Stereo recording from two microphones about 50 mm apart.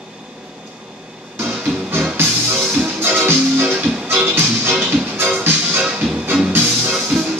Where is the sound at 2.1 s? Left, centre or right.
Right.